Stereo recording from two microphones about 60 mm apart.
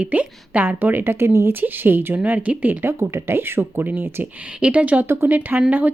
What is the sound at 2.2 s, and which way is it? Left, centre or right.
Speech, right.